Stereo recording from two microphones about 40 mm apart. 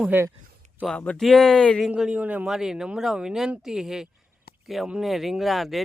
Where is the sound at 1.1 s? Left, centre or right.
Centre.